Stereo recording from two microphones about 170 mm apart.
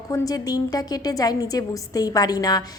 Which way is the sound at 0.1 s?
20° left (ahead or behind).